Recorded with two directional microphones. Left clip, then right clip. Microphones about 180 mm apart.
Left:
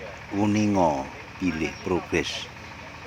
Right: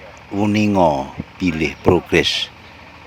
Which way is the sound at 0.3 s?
35° right (ahead or behind).